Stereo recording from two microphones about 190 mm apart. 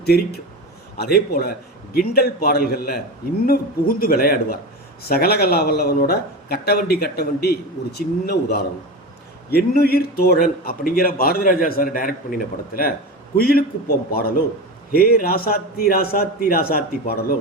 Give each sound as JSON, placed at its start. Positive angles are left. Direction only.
{"t": 0.0, "sound": "a man's voice", "side_deg": 55}